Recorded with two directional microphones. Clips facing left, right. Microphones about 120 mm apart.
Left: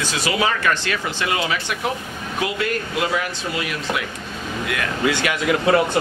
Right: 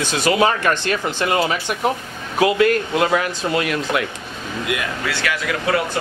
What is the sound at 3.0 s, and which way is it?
Speech, 55° right (ahead or behind).